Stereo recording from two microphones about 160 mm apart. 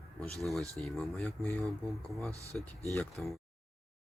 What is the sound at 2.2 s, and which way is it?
Speech, 20° right (ahead or behind).